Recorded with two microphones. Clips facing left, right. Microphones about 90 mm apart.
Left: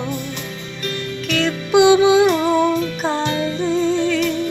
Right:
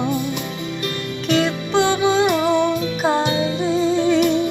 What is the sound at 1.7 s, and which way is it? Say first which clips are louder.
Music: left 7 dB; 15° left (ahead or behind).